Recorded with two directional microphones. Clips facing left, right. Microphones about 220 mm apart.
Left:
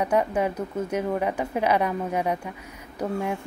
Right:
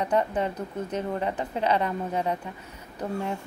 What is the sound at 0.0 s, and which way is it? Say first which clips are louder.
A woman's voice: left 2 dB; 10° left (ahead or behind).